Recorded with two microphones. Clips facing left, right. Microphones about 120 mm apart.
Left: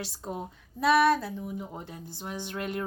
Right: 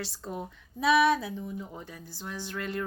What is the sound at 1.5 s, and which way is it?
Speech, 20° left (ahead or behind).